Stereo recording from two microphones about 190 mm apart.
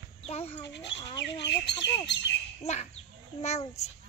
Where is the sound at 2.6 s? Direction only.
35° left (ahead or behind).